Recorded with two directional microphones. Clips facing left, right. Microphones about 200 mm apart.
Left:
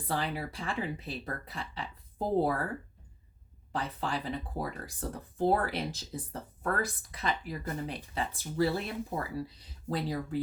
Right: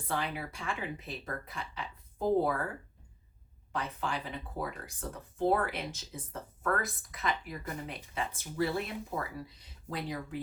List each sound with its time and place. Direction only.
0.1 s speech: 35° left (ahead or behind)
3.7 s speech: 35° left (ahead or behind)